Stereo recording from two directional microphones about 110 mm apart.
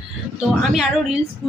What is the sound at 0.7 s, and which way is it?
Speech, 5° right (ahead or behind).